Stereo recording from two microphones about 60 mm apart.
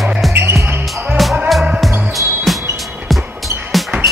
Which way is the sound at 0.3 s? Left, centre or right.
Right.